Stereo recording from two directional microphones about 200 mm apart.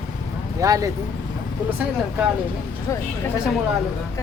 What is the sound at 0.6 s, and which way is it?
Speech, 15° right (ahead or behind).